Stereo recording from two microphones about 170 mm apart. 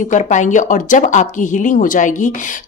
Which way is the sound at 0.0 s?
45° left (ahead or behind).